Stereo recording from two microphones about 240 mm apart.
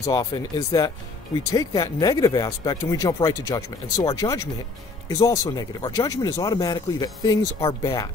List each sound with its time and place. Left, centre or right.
0.0 s speech: centre